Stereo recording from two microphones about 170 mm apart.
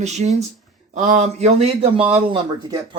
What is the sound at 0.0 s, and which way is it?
Speech, 40° right (ahead or behind).